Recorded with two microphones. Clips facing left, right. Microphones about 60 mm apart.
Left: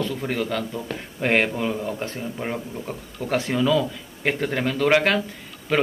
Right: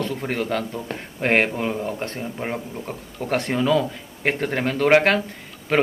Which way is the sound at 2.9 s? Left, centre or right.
Right.